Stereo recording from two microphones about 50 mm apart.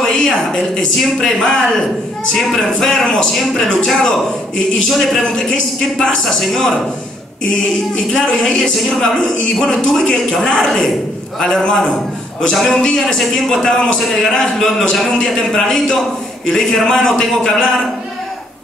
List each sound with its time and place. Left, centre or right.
0.1 s a man's voice: centre
5.2 s a man's voice: centre
8.1 s a man's voice: centre